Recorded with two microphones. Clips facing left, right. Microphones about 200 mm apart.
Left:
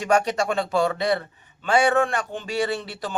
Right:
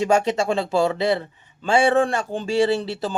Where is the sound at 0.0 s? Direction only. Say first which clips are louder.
Right 2 dB; 25° right (ahead or behind).